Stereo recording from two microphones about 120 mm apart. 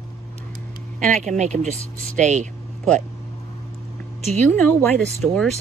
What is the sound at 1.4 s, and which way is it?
Speech, 75° right (ahead or behind).